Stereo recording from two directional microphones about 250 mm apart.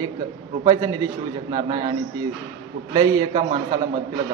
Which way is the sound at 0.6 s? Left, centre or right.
Centre.